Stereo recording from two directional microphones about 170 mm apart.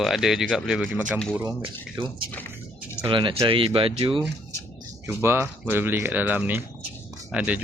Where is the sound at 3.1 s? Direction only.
30° right (ahead or behind).